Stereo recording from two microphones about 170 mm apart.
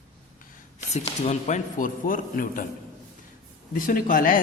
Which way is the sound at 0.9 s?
40° left (ahead or behind).